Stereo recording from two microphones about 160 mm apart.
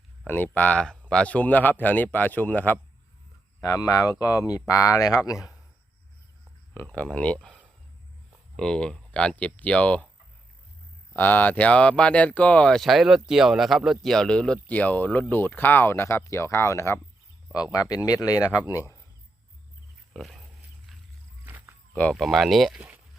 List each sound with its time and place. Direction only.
0.3 s speech: 10° left (ahead or behind)
3.6 s speech: 20° left (ahead or behind)
6.8 s speech: 10° left (ahead or behind)
11.1 s speech: 10° left (ahead or behind)
20.1 s speech: centre (ahead or behind)
21.4 s a sound: 10° right (ahead or behind)
22.1 s speech: centre (ahead or behind)